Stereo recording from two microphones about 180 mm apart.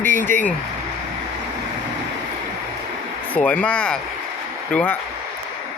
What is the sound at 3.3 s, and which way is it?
A man's voice, 10° left (ahead or behind).